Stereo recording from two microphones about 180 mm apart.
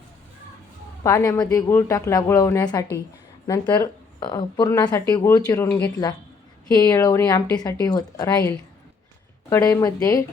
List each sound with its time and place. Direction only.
1.0 s speech: 15° left (ahead or behind)